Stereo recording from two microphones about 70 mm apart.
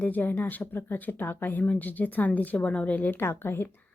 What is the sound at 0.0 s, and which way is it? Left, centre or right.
Speech, left.